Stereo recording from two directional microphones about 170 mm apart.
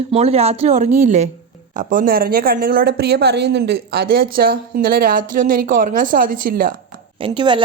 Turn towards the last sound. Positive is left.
turn(degrees=-30)  # may be behind; listen again after turning